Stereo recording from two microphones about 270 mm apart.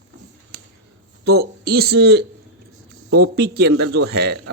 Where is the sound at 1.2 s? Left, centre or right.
Right.